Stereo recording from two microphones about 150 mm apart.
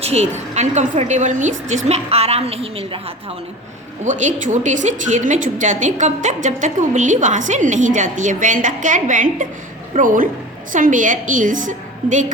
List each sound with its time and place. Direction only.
0.0 s a woman's voice: 45° right (ahead or behind)
4.0 s a woman's voice: 55° right (ahead or behind)